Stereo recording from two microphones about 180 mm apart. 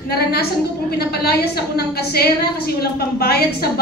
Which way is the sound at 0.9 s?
60° left (ahead or behind).